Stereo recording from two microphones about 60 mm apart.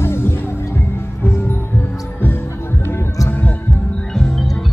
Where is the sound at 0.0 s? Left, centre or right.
Left.